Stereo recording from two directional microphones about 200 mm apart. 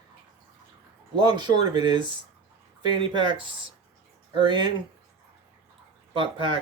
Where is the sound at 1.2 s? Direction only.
20° right (ahead or behind).